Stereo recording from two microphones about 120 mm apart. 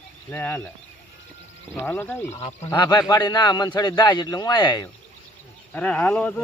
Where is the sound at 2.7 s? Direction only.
35° left (ahead or behind).